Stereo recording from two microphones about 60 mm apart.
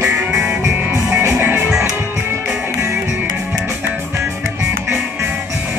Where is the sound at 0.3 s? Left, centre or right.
Centre.